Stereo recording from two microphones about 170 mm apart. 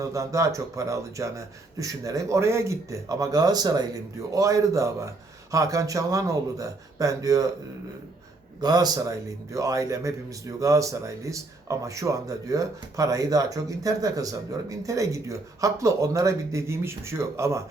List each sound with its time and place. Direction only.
0.0 s a man's voice: 20° right (ahead or behind)
8.6 s a man's voice: 25° right (ahead or behind)